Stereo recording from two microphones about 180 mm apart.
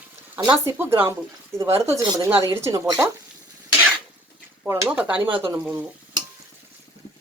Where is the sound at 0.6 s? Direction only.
15° right (ahead or behind).